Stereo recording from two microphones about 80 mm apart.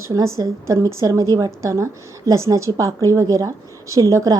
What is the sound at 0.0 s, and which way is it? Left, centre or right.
A woman's voice, right.